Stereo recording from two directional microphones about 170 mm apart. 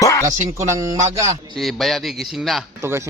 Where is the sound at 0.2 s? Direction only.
15° right (ahead or behind).